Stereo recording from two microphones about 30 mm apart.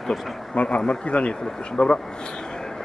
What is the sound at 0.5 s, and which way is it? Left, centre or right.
Speech, left.